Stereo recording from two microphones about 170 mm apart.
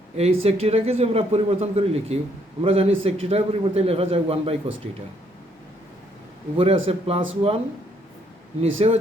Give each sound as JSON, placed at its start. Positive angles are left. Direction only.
{"t": 0.2, "sound": "a man's voice", "side_deg": -35}
{"t": 6.6, "sound": "a man's voice", "side_deg": -35}
{"t": 8.6, "sound": "a man's voice", "side_deg": -35}